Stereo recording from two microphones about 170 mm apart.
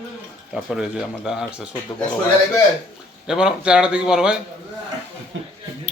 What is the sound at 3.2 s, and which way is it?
A man's voice, 5° right (ahead or behind).